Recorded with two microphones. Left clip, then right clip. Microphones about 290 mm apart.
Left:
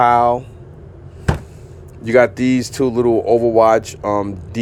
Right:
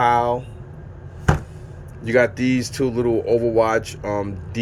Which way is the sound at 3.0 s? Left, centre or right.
Centre.